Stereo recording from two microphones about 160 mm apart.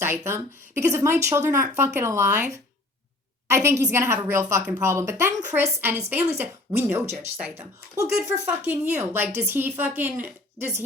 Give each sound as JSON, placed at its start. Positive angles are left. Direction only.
{"t": 0.0, "sound": "speech", "side_deg": -15}